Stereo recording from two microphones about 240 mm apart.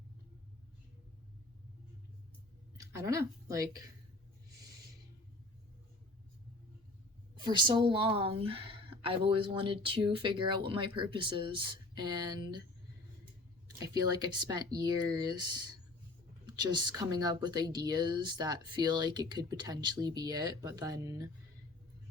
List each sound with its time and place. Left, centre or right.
2.7 s speech: centre
7.4 s a woman's voice: centre
13.8 s speech: centre